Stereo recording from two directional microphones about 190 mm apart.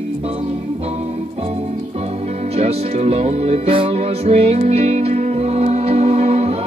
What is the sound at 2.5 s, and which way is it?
Music, 35° right (ahead or behind).